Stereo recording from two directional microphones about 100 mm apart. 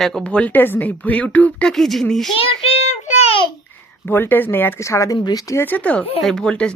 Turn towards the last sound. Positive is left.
turn(degrees=10)  # may be behind; listen again after turning